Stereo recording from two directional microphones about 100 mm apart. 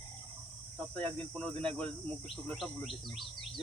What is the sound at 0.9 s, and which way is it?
Speech, 10° left (ahead or behind).